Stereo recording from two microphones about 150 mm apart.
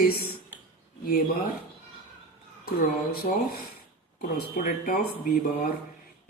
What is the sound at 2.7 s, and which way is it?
Speech, 90° left.